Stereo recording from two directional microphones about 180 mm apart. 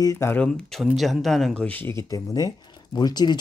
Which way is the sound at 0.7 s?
Centre (ahead or behind).